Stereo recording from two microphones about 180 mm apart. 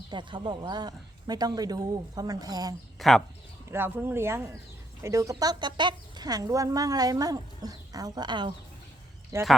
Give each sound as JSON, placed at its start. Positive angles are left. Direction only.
{"t": 0.1, "sound": "speech", "side_deg": -25}
{"t": 3.0, "sound": "speech", "side_deg": 0}
{"t": 3.7, "sound": "speech", "side_deg": -10}